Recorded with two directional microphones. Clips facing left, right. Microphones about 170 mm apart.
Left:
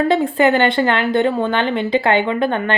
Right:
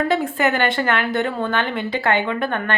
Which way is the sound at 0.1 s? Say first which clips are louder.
Left 5 dB; 25° left (ahead or behind).